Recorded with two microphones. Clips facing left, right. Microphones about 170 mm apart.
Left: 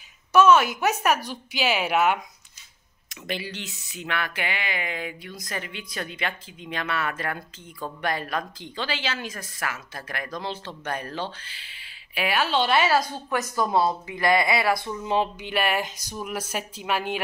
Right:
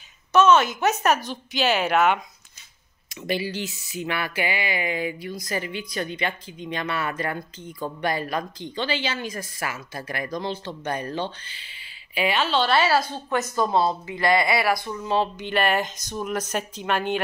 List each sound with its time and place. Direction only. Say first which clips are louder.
0.3 s speech: even; 10° left (ahead or behind)
3.2 s speech: right 6 dB; 5° right (ahead or behind); by 13.1 s 20° left (ahead or behind)
13.1 s speech: right 2 dB; 20° right (ahead or behind)
14.4 s speech: right 1 dB; 20° left (ahead or behind); by 17.2 s 5° left (ahead or behind)